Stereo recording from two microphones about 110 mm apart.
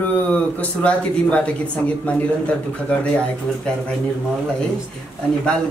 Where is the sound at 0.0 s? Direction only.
15° left (ahead or behind).